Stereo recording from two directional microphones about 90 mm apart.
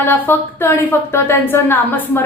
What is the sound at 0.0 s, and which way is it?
A woman's voice, 25° left (ahead or behind).